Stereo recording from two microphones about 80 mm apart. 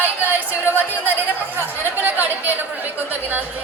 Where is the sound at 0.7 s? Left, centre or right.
Right.